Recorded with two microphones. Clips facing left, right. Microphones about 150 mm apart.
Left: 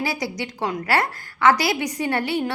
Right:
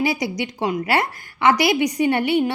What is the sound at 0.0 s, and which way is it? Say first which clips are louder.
Speech: right 4 dB; 15° right (ahead or behind).